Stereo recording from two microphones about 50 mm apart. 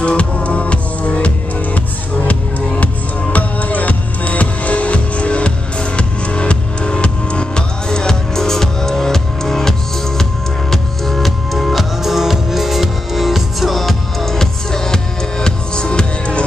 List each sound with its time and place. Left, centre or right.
0.0 s music: left
3.3 s music: left